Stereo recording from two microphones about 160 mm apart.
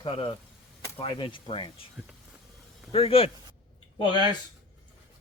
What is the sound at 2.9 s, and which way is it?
Speech, 35° left (ahead or behind).